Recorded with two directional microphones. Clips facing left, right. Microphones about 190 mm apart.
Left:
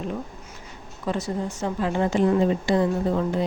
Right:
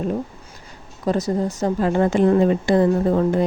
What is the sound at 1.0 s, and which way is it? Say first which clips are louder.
A woman's voice: right 6 dB; 40° right (ahead or behind).